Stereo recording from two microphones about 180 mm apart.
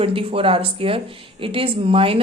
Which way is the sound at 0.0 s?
30° right (ahead or behind).